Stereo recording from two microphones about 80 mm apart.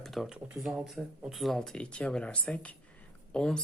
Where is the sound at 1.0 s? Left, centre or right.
Centre.